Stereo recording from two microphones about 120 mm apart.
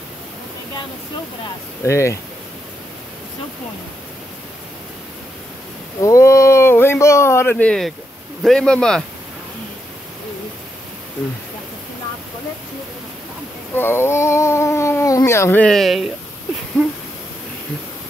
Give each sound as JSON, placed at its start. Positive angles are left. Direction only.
{"t": 1.9, "sound": "speech", "side_deg": 25}
{"t": 6.0, "sound": "speech", "side_deg": 25}
{"t": 13.7, "sound": "speech", "side_deg": 20}
{"t": 15.6, "sound": "speech", "side_deg": 0}